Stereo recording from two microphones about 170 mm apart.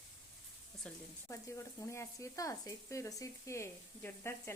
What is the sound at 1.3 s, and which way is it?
Speech, 15° left (ahead or behind).